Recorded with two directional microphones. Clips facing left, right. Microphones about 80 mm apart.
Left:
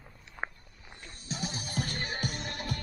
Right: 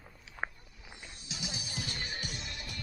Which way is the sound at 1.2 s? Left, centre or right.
Left.